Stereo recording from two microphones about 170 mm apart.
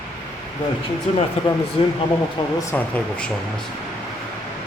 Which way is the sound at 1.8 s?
35° left (ahead or behind).